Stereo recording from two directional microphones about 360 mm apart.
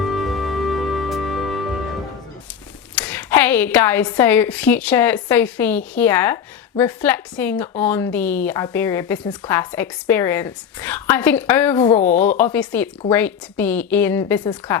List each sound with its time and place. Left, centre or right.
0.0 s music: centre
2.9 s a woman's voice: centre